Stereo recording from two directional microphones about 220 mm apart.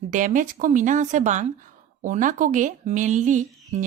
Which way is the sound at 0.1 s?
35° right (ahead or behind).